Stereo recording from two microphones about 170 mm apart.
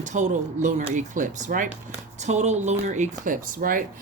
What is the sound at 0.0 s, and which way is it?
Speech, 45° right (ahead or behind).